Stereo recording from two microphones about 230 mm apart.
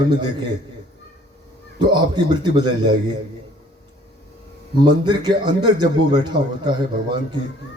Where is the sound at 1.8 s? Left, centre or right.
Centre.